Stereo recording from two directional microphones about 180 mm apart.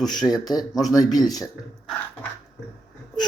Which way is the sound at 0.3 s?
20° left (ahead or behind).